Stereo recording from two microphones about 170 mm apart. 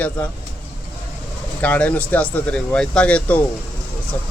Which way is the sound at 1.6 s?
10° left (ahead or behind).